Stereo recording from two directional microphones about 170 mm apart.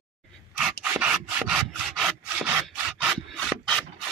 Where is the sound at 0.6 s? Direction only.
5° right (ahead or behind).